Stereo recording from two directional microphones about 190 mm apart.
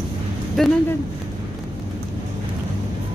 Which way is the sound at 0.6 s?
Centre (ahead or behind).